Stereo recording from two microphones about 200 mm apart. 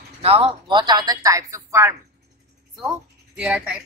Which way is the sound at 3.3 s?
5° right (ahead or behind).